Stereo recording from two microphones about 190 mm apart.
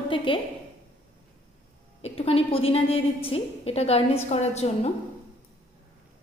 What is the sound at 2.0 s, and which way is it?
A woman's voice, 30° left (ahead or behind).